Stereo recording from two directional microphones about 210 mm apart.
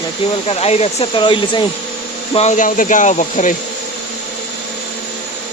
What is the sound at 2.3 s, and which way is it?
Speech, 35° left (ahead or behind).